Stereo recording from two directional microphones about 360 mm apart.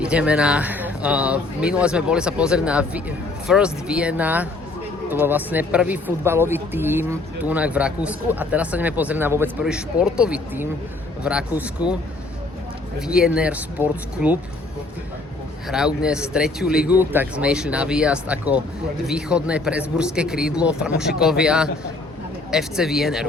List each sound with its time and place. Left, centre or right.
0.0 s speech: centre
13.1 s speech: centre
16.0 s speech: centre